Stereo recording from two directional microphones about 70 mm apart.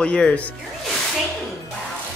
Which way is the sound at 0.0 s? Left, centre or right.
Centre.